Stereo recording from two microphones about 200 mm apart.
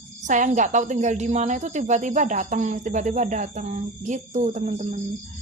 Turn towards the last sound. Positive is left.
turn(degrees=-35)  # may be behind; listen again after turning